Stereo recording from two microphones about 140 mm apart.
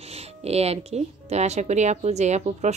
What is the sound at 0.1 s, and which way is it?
Speech, 45° right (ahead or behind).